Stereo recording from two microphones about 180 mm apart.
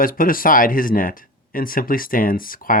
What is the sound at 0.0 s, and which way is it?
Speech, 50° left (ahead or behind).